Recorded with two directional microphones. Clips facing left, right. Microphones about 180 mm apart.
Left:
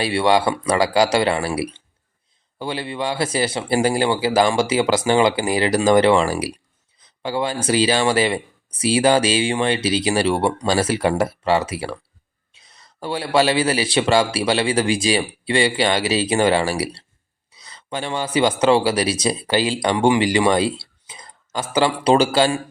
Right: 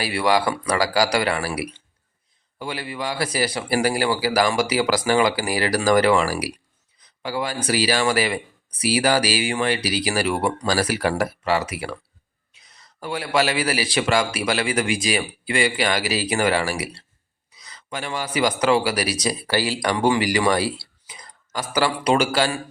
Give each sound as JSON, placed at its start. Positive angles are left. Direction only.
{"t": 0.0, "sound": "speech", "side_deg": 25}